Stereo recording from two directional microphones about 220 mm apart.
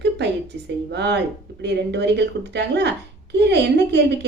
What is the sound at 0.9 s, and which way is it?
Speech, 50° right (ahead or behind).